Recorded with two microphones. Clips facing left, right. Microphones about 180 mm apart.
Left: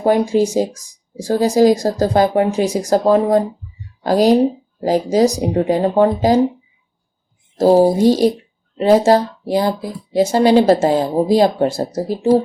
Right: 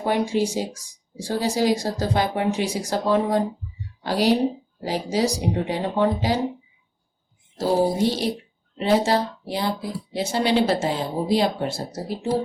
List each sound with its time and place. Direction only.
0.0 s speech: 45° left (ahead or behind)
7.6 s speech: 40° left (ahead or behind)